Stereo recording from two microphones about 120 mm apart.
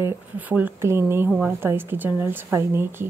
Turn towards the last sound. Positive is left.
turn(degrees=-20)  # may be behind; listen again after turning